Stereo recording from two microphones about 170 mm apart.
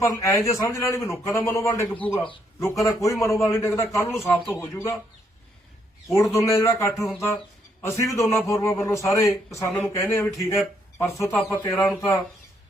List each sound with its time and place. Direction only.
0.0 s speech: 20° left (ahead or behind)
2.6 s speech: 20° left (ahead or behind)
6.1 s speech: 15° left (ahead or behind)